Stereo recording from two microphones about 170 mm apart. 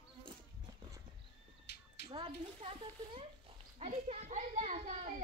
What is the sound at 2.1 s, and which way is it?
A child's voice, 35° right (ahead or behind).